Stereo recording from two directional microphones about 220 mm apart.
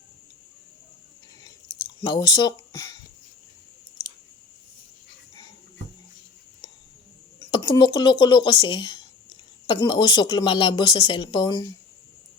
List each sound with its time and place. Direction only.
1.5 s chewing: 20° left (ahead or behind)
7.5 s a woman's voice: 20° left (ahead or behind)